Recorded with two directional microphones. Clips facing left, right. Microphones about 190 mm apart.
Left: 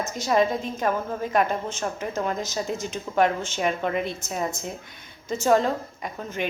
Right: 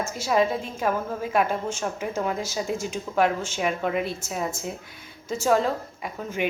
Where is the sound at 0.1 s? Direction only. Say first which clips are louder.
Left 1 dB; 5° right (ahead or behind).